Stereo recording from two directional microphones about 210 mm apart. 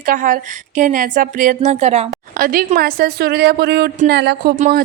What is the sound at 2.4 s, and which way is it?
A woman's voice, 40° right (ahead or behind).